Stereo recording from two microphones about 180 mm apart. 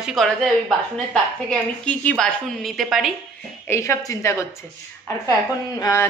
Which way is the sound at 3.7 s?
15° left (ahead or behind).